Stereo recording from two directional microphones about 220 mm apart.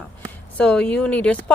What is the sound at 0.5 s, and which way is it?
Speech, 5° left (ahead or behind).